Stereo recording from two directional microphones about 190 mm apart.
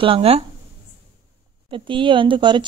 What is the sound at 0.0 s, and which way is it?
Speech, 30° right (ahead or behind).